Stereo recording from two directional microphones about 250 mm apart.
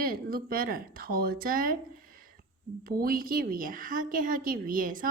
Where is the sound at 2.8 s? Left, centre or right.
Right.